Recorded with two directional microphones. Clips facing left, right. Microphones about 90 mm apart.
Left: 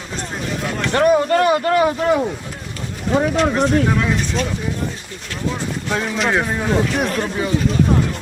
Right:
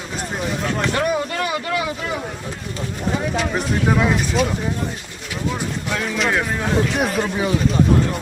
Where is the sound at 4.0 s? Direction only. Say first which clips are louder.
Right 1 dB; 5° right (ahead or behind).